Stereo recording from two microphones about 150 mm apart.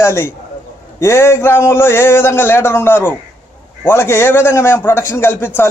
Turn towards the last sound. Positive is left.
turn(degrees=15)  # may be behind; listen again after turning